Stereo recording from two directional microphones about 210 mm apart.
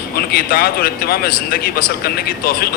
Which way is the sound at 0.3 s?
45° left (ahead or behind).